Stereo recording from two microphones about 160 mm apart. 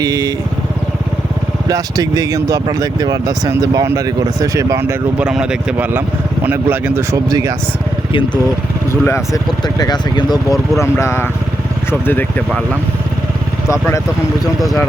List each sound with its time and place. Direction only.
0.0 s speech: 25° right (ahead or behind)
1.6 s speech: 25° right (ahead or behind)
8.9 s speech: 15° left (ahead or behind)
13.7 s speech: 15° left (ahead or behind)